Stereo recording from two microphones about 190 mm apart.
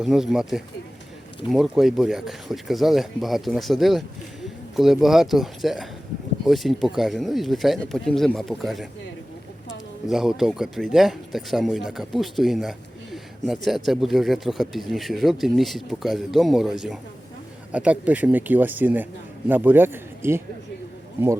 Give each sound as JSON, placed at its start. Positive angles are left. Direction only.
{"t": 0.0, "sound": "speech", "side_deg": 0}
{"t": 10.1, "sound": "speech", "side_deg": 0}